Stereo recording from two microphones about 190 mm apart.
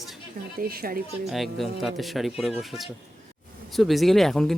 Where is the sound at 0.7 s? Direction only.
50° right (ahead or behind).